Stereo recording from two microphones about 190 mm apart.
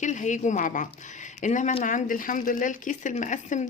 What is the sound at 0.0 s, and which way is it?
A woman's voice, 40° left (ahead or behind).